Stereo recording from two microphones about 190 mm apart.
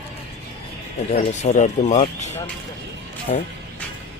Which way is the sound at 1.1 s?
40° left (ahead or behind).